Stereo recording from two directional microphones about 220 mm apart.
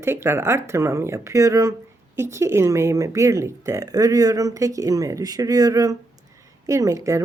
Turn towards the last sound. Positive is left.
turn(degrees=-15)  # may be behind; listen again after turning